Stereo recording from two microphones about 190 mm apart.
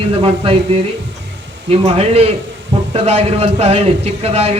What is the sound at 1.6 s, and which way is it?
A man's voice, 30° right (ahead or behind).